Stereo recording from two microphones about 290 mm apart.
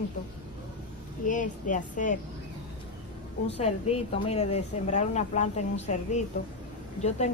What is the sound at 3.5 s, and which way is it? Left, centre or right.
Speech, left.